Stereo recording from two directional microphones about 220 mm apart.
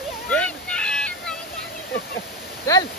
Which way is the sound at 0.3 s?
5° left (ahead or behind).